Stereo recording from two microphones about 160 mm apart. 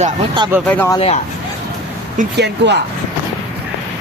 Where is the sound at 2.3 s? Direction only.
90° right.